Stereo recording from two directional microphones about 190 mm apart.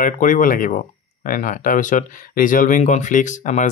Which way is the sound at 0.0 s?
45° left (ahead or behind).